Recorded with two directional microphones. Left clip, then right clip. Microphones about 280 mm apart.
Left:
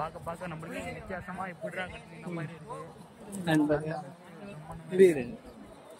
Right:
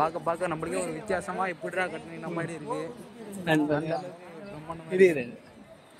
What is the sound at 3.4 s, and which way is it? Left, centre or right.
Speech, centre.